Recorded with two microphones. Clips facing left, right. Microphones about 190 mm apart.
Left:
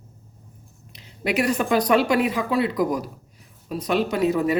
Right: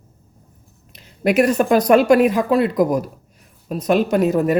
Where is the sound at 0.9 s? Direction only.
50° right (ahead or behind).